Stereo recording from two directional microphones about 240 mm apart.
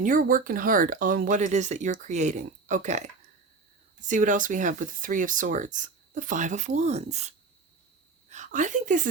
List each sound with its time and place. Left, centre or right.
0.0 s a woman's voice: right